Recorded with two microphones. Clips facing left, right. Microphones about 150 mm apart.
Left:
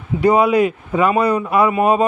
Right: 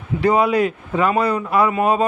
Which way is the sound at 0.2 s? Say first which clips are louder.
Left 3 dB; 10° left (ahead or behind).